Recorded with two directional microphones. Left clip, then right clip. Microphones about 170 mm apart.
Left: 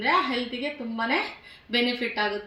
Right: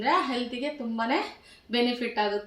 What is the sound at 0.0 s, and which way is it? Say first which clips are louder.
A woman's voice: left 2 dB; 15° right (ahead or behind).